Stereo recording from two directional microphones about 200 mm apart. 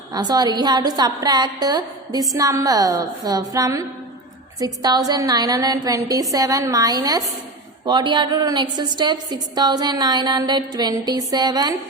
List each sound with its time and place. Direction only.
0.1 s a woman's voice: 20° right (ahead or behind)